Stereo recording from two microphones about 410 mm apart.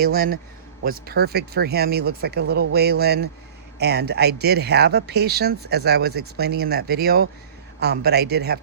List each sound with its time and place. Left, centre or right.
0.0 s speech: right